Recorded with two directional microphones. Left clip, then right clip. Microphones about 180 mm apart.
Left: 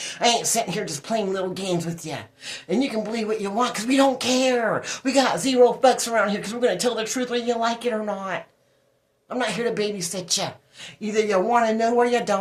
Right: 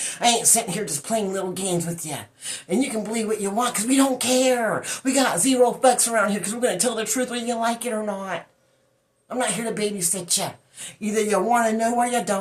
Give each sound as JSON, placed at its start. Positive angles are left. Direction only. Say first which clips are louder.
{"t": 0.2, "sound": "speech", "louder": "even", "side_deg": 35}
{"t": 9.4, "sound": "speech", "louder": "left 1 dB", "side_deg": 30}